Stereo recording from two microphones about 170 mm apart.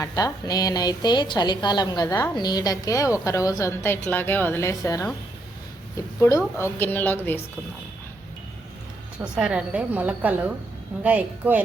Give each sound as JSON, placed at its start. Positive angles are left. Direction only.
{"t": 0.0, "sound": "a woman's voice", "side_deg": 20}
{"t": 6.2, "sound": "a woman's voice", "side_deg": 15}
{"t": 9.1, "sound": "a woman's voice", "side_deg": -5}